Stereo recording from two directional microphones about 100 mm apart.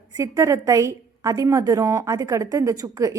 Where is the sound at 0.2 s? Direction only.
30° right (ahead or behind).